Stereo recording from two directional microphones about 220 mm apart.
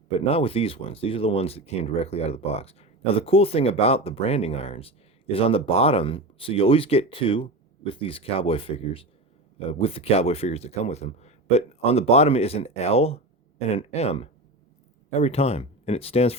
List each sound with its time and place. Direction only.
0.3 s speech: 25° left (ahead or behind)